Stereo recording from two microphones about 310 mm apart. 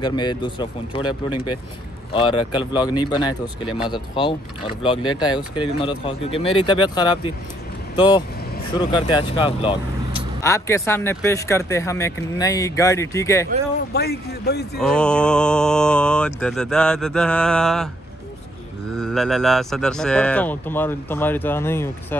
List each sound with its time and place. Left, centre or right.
0.0 s speech: centre
13.9 s speech: left
14.8 s speech: centre
18.9 s speech: centre